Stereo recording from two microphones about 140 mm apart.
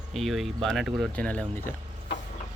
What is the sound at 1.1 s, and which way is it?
Speech, 10° left (ahead or behind).